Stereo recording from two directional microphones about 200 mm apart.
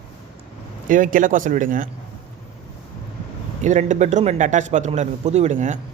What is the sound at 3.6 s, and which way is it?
Speech, 35° right (ahead or behind).